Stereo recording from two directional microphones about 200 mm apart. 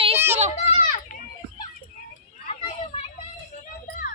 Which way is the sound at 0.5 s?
35° left (ahead or behind).